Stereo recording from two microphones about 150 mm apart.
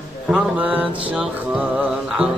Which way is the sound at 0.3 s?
10° right (ahead or behind).